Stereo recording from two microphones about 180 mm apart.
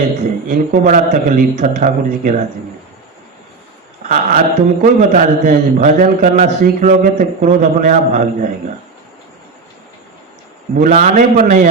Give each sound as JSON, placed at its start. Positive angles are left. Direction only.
{"t": 0.5, "sound": "a man's voice", "side_deg": -45}
{"t": 4.1, "sound": "a man's voice", "side_deg": -45}
{"t": 10.8, "sound": "a man's voice", "side_deg": -45}